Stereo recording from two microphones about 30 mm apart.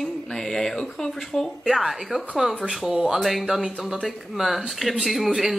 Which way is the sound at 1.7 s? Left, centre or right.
Centre.